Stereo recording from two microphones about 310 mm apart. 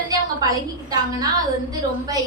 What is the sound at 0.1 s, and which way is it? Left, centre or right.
A woman's voice, centre.